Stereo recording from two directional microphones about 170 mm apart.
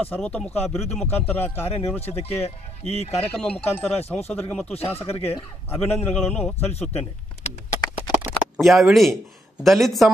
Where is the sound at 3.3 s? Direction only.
5° left (ahead or behind).